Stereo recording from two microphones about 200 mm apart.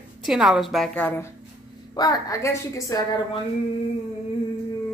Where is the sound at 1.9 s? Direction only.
20° left (ahead or behind).